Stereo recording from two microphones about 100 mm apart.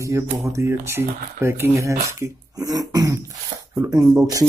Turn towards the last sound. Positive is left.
turn(degrees=-35)  # may be behind; listen again after turning